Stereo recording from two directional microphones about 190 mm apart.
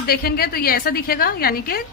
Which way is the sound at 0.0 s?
50° left (ahead or behind).